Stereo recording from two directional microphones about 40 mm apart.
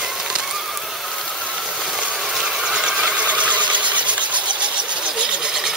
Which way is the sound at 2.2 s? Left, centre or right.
Centre.